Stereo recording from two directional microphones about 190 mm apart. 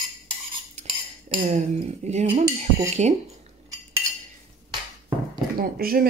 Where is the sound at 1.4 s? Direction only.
35° right (ahead or behind).